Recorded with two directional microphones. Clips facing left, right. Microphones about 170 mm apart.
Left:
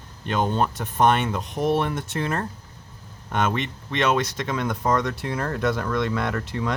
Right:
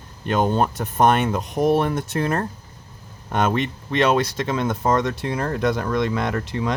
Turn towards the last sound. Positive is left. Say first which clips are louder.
# right 2 dB
turn(degrees=-20)  # may be behind; listen again after turning